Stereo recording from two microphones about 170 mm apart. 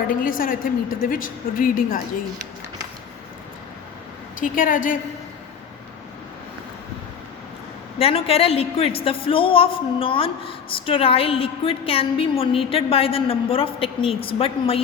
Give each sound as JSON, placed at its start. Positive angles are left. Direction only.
{"t": 0.1, "sound": "a woman's voice", "side_deg": 55}
{"t": 4.4, "sound": "a woman's voice", "side_deg": 55}
{"t": 7.9, "sound": "a woman's voice", "side_deg": 35}